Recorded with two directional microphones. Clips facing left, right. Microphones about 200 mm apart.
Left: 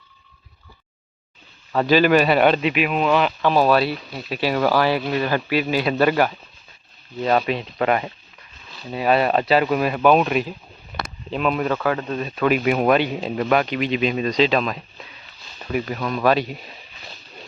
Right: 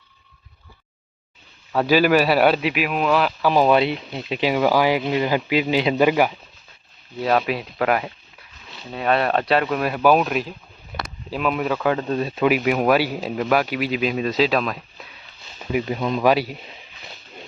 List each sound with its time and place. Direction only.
1.7 s a man's voice: 10° right (ahead or behind)
3.5 s a man's voice: 15° right (ahead or behind)
11.8 s speech: 20° right (ahead or behind)
12.4 s a man's voice: 10° right (ahead or behind)
15.5 s a sound: 10° right (ahead or behind)
15.9 s speech: 20° right (ahead or behind)